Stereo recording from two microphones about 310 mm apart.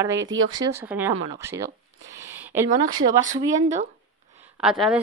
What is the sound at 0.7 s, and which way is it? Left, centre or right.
Speech, centre.